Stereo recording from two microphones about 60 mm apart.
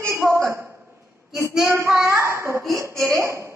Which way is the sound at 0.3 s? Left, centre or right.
Right.